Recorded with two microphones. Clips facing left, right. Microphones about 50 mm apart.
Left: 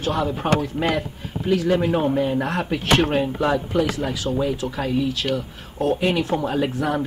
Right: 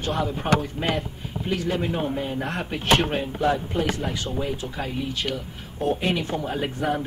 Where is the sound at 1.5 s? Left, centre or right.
Left.